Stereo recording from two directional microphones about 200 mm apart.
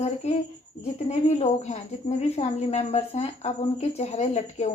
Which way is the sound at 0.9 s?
35° left (ahead or behind).